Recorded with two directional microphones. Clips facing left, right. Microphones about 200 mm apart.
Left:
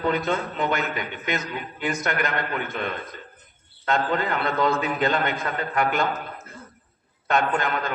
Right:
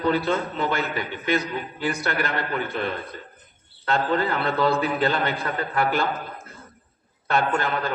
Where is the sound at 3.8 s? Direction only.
35° right (ahead or behind).